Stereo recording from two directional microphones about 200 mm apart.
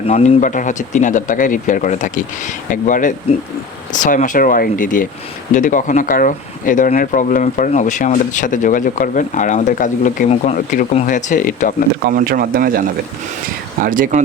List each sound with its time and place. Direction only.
0.1 s speech: 35° left (ahead or behind)
12.0 s speech: 50° right (ahead or behind)
13.8 s speech: 45° right (ahead or behind)